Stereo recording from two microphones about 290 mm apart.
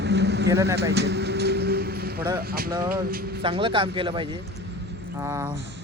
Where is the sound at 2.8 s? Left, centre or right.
Right.